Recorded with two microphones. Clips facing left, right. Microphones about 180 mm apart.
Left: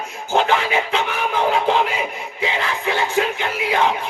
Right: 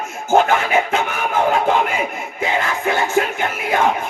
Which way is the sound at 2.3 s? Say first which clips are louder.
Right 3 dB; 45° right (ahead or behind).